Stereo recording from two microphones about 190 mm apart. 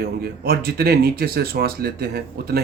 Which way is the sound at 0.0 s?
55° right (ahead or behind).